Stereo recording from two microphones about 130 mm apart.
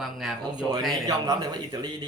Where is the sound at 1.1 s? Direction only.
30° right (ahead or behind).